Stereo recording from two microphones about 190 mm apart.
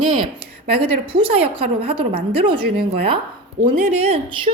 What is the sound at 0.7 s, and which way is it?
A woman's voice, 30° right (ahead or behind).